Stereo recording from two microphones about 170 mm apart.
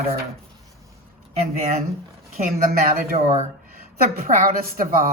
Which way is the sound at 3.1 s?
35° right (ahead or behind).